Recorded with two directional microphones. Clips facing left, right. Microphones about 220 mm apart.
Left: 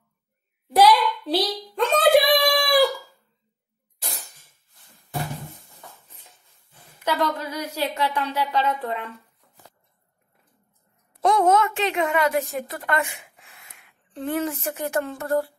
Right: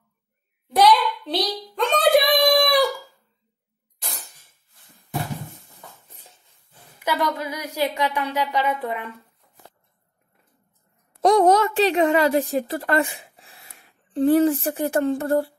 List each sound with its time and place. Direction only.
0.7 s hands: 5° left (ahead or behind)
1.8 s a sound: centre (ahead or behind)
7.1 s speech: 10° right (ahead or behind)
11.1 s a woman's voice: 35° right (ahead or behind)